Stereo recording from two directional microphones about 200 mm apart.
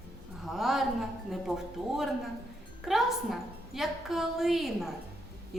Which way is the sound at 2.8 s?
Centre (ahead or behind).